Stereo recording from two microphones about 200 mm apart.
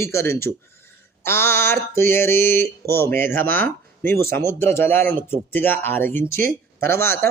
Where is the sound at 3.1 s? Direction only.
10° left (ahead or behind).